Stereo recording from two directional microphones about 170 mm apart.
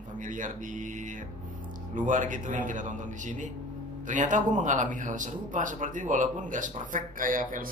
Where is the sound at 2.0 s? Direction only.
50° right (ahead or behind).